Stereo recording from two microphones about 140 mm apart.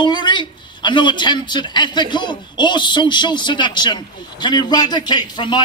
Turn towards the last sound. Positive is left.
turn(degrees=30)  # may be behind; listen again after turning